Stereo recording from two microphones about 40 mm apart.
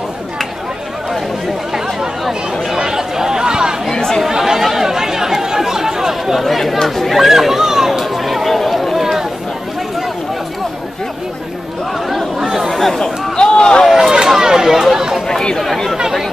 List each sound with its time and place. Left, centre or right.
2.8 s chatter: centre
3.9 s chatter: centre
4.3 s chatter: centre
6.4 s chatter: centre
7.2 s a sound: centre
8.0 s chatter: centre
12.4 s chatter: centre
12.6 s chatter: centre
13.4 s a sound: centre
13.8 s chatter: centre
15.2 s chatter: centre
15.6 s speech: centre